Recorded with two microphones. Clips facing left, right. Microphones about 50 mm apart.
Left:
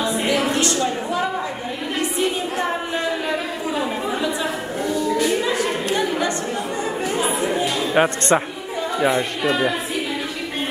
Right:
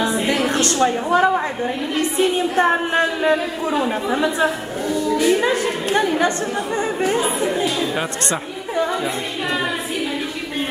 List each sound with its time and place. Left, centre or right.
0.5 s a sound: right
4.1 s a woman's voice: right
5.2 s a capella: right
7.6 s speech: left